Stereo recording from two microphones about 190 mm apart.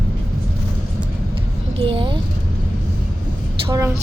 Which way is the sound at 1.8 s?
25° right (ahead or behind).